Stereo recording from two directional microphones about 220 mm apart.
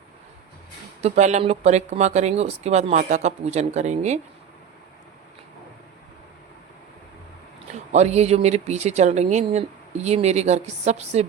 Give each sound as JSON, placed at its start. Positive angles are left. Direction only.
{"t": 1.0, "sound": "speech", "side_deg": -30}
{"t": 7.9, "sound": "speech", "side_deg": -30}